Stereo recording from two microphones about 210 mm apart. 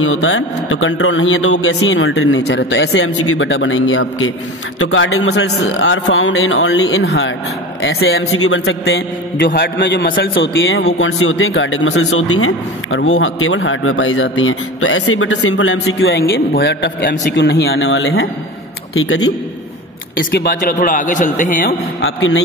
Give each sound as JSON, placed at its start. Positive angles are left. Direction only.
{"t": 0.0, "sound": "a man's voice", "side_deg": 70}
{"t": 7.9, "sound": "a man's voice", "side_deg": 75}
{"t": 10.0, "sound": "a man's voice", "side_deg": 45}
{"t": 10.4, "sound": "a man's voice", "side_deg": 65}
{"t": 11.0, "sound": "a man's voice", "side_deg": 75}
{"t": 13.6, "sound": "a man's voice", "side_deg": 70}
{"t": 16.0, "sound": "a man's voice", "side_deg": 55}
{"t": 18.9, "sound": "a man's voice", "side_deg": 80}
{"t": 20.2, "sound": "a man's voice", "side_deg": 45}